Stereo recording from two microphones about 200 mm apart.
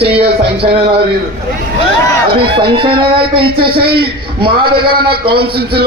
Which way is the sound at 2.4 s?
25° right (ahead or behind).